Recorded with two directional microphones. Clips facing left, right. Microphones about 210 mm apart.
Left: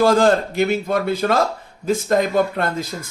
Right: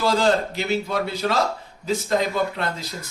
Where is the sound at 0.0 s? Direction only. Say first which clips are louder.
Left 5 dB; 50° left (ahead or behind).